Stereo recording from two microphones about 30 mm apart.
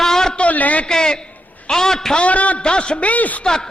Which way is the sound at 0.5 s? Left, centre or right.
Left.